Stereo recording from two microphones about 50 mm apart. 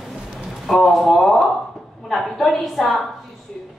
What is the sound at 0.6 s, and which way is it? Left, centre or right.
A woman's voice, centre.